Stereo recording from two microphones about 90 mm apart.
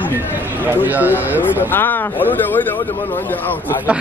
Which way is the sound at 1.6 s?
20° left (ahead or behind).